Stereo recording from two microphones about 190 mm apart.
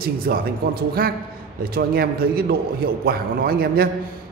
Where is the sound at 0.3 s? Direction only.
50° right (ahead or behind).